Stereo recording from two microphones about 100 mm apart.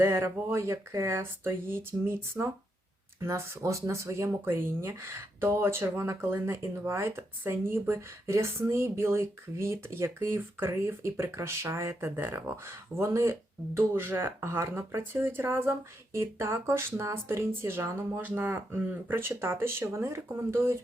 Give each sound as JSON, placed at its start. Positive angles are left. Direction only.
{"t": 0.0, "sound": "speech", "side_deg": -25}